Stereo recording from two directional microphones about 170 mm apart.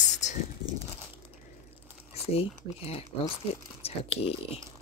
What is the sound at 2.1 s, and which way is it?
Speech, 35° left (ahead or behind).